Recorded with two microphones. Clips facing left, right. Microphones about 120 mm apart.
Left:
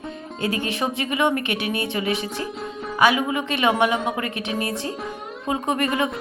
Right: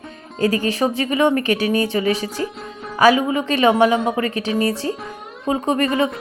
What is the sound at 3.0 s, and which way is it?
Speech, 35° right (ahead or behind).